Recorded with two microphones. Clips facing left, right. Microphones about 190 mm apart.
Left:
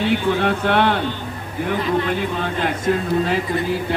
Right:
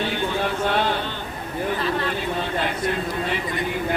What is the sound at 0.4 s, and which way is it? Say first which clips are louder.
Speech: left 5 dB; 60° left (ahead or behind).